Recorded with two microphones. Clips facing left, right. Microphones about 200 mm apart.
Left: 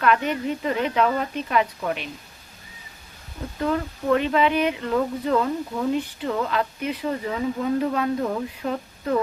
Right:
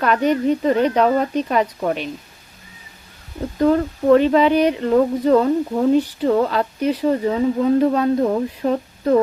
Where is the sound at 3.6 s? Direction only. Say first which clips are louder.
Right 9 dB; 35° right (ahead or behind).